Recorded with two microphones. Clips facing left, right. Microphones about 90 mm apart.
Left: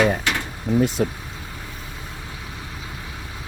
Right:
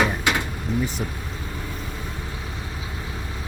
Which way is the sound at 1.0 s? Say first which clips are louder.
Left 7 dB; 90° left.